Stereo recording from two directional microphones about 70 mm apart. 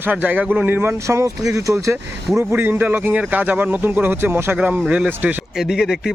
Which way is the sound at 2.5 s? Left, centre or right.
Right.